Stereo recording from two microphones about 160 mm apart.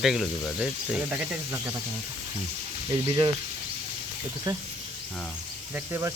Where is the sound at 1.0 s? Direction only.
15° right (ahead or behind).